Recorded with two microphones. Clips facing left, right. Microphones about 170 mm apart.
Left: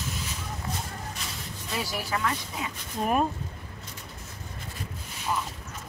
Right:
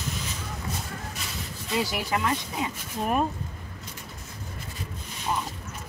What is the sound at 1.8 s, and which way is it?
Speech, 20° right (ahead or behind).